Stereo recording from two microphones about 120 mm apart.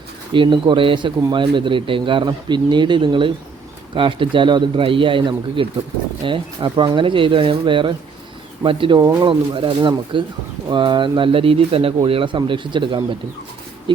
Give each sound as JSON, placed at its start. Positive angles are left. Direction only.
{"t": 0.3, "sound": "speech", "side_deg": -40}